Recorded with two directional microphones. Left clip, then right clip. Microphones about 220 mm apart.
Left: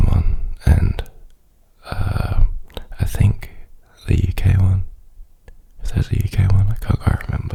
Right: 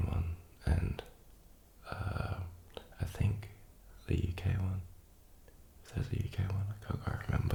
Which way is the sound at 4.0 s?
40° left (ahead or behind).